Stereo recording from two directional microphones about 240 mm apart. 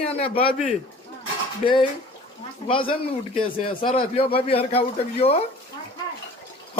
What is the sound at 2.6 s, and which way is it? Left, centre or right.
A man's voice, left.